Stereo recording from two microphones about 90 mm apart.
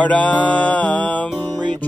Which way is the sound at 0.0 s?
15° left (ahead or behind).